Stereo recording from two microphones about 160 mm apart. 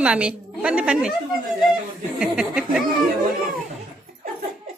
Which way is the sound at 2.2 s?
5° right (ahead or behind).